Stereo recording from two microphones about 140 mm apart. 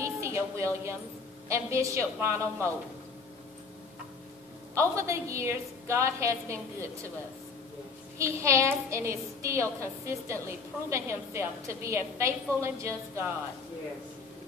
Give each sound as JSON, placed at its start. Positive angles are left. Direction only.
{"t": 0.0, "sound": "a sound", "side_deg": -20}
{"t": 1.5, "sound": "a woman's voice", "side_deg": -20}
{"t": 4.7, "sound": "a woman's voice", "side_deg": -20}
{"t": 8.2, "sound": "a woman's voice", "side_deg": -20}